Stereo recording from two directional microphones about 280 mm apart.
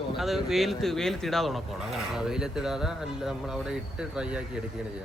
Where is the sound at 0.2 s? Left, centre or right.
Centre.